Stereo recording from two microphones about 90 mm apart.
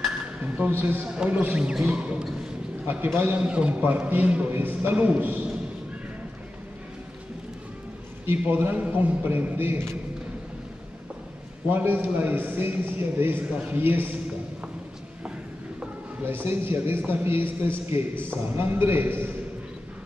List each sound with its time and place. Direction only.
0.7 s a man's voice: 25° right (ahead or behind)
1.0 s a man's voice: 10° right (ahead or behind)
8.3 s a man's voice: 20° right (ahead or behind)
11.7 s a man's voice: 25° right (ahead or behind)
16.3 s a man's voice: 25° right (ahead or behind)